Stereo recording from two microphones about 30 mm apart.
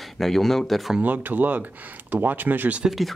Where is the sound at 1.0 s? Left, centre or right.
Right.